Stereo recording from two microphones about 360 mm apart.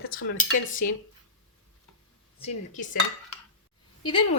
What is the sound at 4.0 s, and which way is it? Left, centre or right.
Speech, centre.